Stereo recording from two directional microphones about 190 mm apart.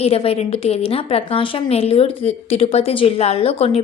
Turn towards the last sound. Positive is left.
turn(degrees=30)  # may be behind; listen again after turning